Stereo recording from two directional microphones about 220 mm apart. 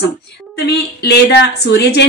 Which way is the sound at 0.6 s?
50° left (ahead or behind).